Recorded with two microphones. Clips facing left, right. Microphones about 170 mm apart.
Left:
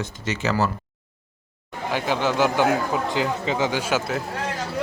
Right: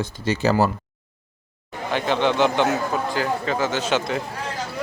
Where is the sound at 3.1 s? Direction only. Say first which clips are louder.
Even; 20° left (ahead or behind).